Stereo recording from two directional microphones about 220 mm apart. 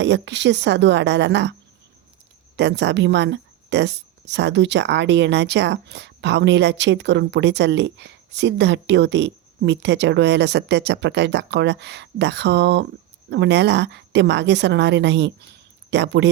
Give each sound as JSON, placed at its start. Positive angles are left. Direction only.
{"t": 0.0, "sound": "a woman's voice", "side_deg": -55}
{"t": 2.6, "sound": "a woman's voice", "side_deg": -50}